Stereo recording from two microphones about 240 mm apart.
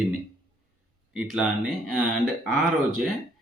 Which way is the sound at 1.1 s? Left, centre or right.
Centre.